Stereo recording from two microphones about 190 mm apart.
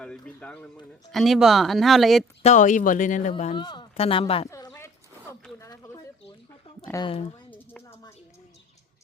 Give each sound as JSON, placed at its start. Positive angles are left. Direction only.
{"t": 0.3, "sound": "speech", "side_deg": 5}
{"t": 2.4, "sound": "speech", "side_deg": 40}
{"t": 3.6, "sound": "speech", "side_deg": 25}
{"t": 4.4, "sound": "a sound", "side_deg": 15}
{"t": 6.9, "sound": "speech", "side_deg": 25}
{"t": 7.5, "sound": "a sound", "side_deg": 10}